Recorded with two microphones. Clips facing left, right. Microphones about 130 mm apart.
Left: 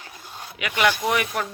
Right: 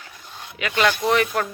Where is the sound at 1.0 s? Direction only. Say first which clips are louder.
Right 4 dB; 15° left (ahead or behind).